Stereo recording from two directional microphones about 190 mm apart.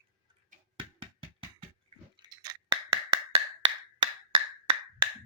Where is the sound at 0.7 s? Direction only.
25° right (ahead or behind).